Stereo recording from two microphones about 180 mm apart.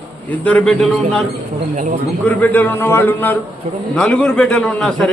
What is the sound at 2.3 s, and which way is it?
A man's voice, 10° left (ahead or behind).